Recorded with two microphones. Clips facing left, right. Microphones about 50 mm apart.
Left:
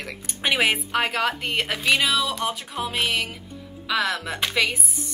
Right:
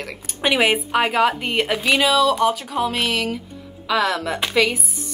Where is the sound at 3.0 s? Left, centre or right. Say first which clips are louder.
Right 2 dB; left.